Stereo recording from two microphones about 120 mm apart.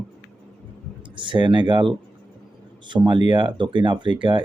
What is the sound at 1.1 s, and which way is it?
Speech, 40° right (ahead or behind).